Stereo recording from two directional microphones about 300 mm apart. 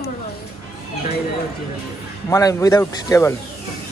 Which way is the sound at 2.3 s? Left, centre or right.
Centre.